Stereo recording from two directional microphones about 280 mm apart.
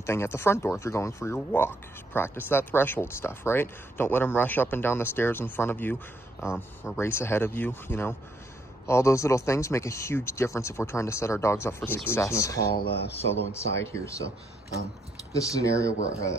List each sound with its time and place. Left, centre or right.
0.0 s speech: centre
12.6 s speech: left
13.5 s speech: centre
15.3 s speech: centre